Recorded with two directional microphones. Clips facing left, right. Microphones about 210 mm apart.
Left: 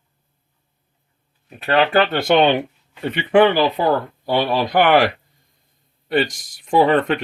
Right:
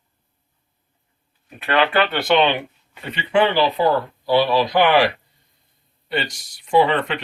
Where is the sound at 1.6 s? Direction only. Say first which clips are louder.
Left 2 dB; 35° left (ahead or behind).